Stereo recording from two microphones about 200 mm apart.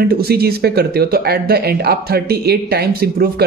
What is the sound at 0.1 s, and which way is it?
Speech, 50° right (ahead or behind).